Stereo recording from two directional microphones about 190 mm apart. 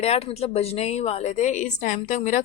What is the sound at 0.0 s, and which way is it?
A woman's voice, 35° left (ahead or behind).